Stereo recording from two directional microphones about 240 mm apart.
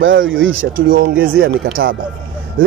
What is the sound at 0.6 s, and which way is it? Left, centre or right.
Speech, right.